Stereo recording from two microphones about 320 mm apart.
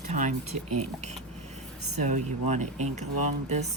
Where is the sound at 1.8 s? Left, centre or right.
Right.